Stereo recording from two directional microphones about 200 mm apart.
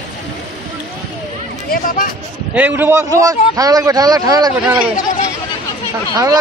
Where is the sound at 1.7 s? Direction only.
45° left (ahead or behind).